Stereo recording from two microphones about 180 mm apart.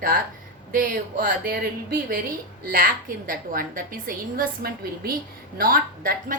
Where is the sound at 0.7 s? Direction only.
50° right (ahead or behind).